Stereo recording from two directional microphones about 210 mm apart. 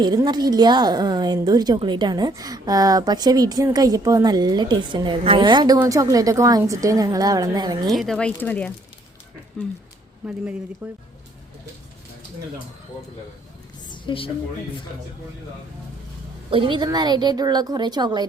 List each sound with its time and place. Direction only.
0.0 s a woman's voice: 20° right (ahead or behind)
7.9 s speech: centre (ahead or behind)
13.9 s a sound: 25° left (ahead or behind)
16.5 s a woman's voice: 25° right (ahead or behind)